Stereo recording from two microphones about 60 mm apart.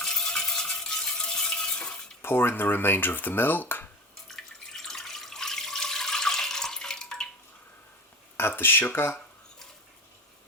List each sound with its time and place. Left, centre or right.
0.0 s stir: centre
2.2 s speech: left
4.3 s water: centre
8.4 s speech: left